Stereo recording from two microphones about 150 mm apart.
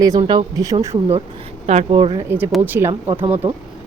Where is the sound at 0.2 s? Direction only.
30° right (ahead or behind).